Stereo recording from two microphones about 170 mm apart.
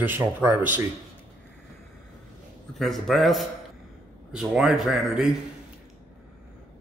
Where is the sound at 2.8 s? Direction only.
Centre (ahead or behind).